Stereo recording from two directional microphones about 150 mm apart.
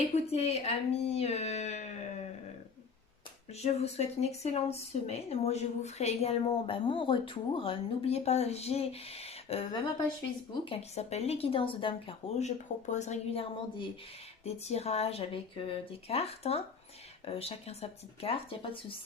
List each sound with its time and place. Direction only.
0.0 s speech: 45° left (ahead or behind)
3.5 s speech: 45° left (ahead or behind)
12.4 s speech: 50° left (ahead or behind); by 18.9 s 35° left (ahead or behind)